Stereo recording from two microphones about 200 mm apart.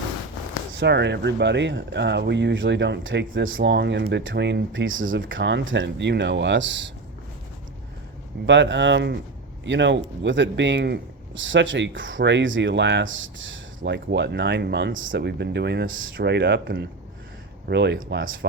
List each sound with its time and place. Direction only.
0.8 s speech: 60° right (ahead or behind)
8.4 s speech: 65° right (ahead or behind)